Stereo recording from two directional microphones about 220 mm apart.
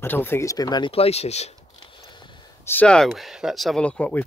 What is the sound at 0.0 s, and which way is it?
Speech, 10° left (ahead or behind).